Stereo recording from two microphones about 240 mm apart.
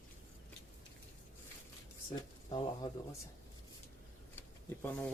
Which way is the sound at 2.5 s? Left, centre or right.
Centre.